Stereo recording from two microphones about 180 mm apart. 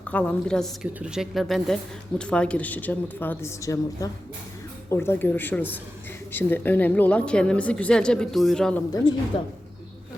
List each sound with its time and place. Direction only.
0.0 s speech: 10° left (ahead or behind)
9.3 s a woman's voice: 30° left (ahead or behind)